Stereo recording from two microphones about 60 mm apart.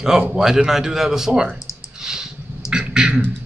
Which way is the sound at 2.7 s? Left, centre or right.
Centre.